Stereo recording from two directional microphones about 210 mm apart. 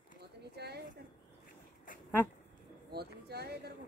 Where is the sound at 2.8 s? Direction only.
50° right (ahead or behind).